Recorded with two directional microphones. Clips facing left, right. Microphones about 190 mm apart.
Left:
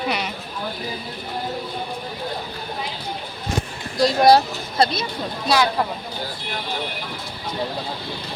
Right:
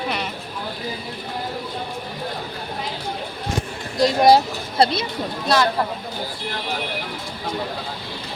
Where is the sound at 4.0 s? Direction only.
20° right (ahead or behind).